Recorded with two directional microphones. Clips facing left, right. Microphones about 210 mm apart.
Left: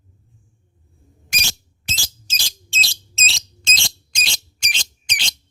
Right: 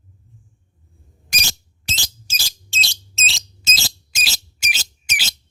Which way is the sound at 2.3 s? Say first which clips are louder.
Even; 5° right (ahead or behind).